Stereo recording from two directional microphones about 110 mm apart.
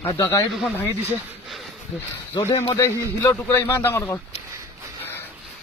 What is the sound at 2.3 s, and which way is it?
Speech, 35° left (ahead or behind).